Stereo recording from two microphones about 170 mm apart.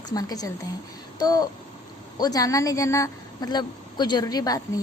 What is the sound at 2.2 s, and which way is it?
Speech, 20° left (ahead or behind).